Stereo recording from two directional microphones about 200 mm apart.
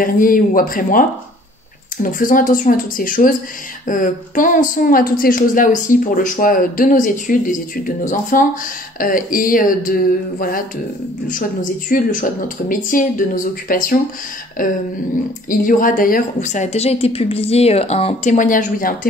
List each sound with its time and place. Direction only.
0.0 s a woman's voice: 45° left (ahead or behind)
2.0 s a woman's voice: 40° left (ahead or behind)
11.2 s a woman's voice: 40° left (ahead or behind)